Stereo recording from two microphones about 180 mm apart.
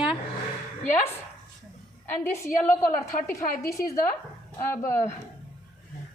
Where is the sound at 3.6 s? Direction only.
15° left (ahead or behind).